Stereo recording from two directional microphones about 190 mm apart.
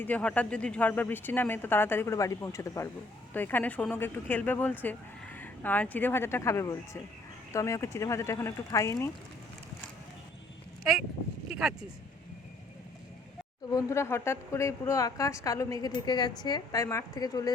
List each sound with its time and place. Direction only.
0.0 s a woman's voice: 5° left (ahead or behind)
11.4 s a sound: 5° right (ahead or behind)
13.7 s a woman's voice: 15° left (ahead or behind)